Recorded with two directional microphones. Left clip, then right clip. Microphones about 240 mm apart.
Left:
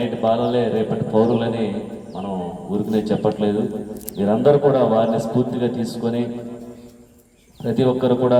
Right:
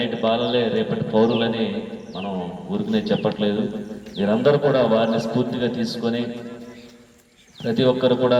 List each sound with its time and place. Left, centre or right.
0.0 s a man's voice: left
7.7 s a man's voice: left